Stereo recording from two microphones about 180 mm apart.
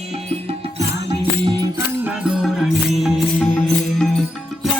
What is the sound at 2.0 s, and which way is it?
Music, 5° right (ahead or behind).